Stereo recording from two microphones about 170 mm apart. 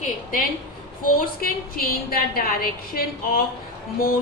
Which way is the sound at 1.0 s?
55° left (ahead or behind).